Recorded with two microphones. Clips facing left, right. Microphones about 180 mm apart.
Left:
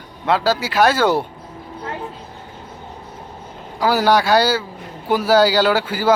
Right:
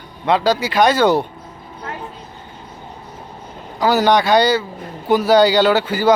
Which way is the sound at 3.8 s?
10° left (ahead or behind).